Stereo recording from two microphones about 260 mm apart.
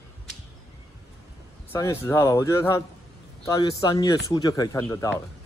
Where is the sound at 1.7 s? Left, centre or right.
Centre.